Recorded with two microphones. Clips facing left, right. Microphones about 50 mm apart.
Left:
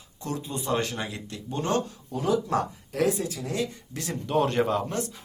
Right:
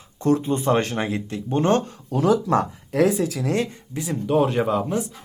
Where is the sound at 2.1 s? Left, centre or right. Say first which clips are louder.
Right 6 dB; right.